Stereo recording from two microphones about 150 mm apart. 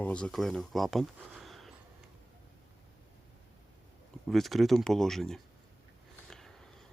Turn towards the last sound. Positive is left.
turn(degrees=0)  # may be behind; listen again after turning